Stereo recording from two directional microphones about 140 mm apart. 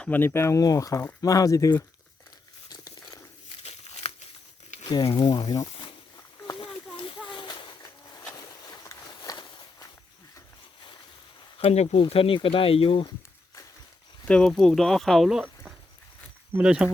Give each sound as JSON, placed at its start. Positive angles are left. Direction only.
{"t": 0.0, "sound": "speech", "side_deg": 15}
{"t": 2.6, "sound": "biting", "side_deg": 25}
{"t": 3.6, "sound": "crumpling", "side_deg": 50}
{"t": 4.9, "sound": "speech", "side_deg": 30}
{"t": 6.6, "sound": "a sound", "side_deg": 40}
{"t": 11.5, "sound": "speech", "side_deg": 50}
{"t": 14.3, "sound": "speech", "side_deg": 5}